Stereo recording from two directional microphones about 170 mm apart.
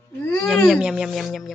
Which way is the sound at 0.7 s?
5° right (ahead or behind).